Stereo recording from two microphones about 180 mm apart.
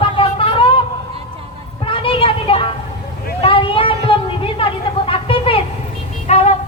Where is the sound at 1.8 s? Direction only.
30° left (ahead or behind).